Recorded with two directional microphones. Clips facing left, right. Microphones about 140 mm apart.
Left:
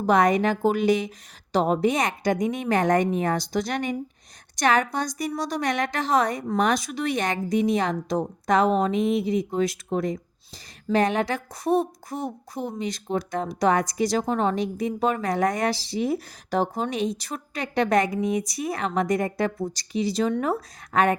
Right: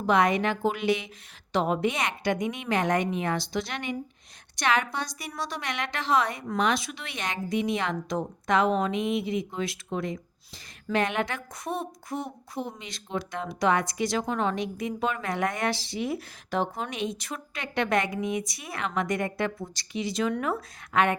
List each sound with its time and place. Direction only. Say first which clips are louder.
0.0 s a woman's voice: left 4 dB; 40° left (ahead or behind)